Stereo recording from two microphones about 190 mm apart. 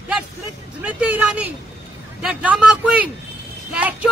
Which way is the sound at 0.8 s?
5° right (ahead or behind).